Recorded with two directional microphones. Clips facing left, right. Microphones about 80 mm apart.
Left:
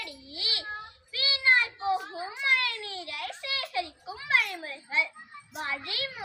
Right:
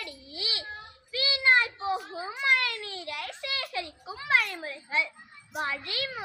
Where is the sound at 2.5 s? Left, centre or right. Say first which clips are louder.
Right 1 dB; right.